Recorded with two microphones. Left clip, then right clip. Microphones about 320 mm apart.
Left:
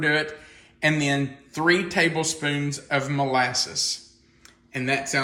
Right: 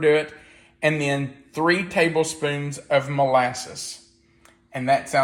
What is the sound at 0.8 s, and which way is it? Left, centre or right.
Speech, centre.